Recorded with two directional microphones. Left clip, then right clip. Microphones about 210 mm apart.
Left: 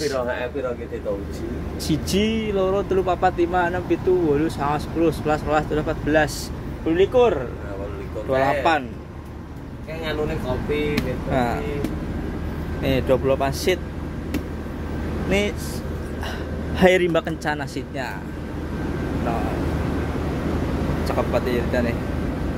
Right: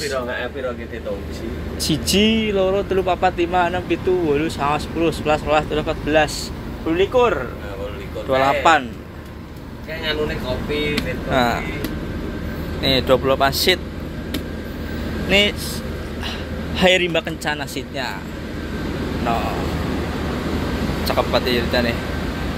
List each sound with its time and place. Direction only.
1.8 s a man's voice: 5° left (ahead or behind); by 7.3 s 20° left (ahead or behind)
8.3 s speech: 5° left (ahead or behind)
11.3 s speech: 5° left (ahead or behind)
12.8 s speech: 5° left (ahead or behind)
15.2 s speech: 10° left (ahead or behind)
16.7 s a man's voice: 25° left (ahead or behind)
21.2 s speech: centre (ahead or behind)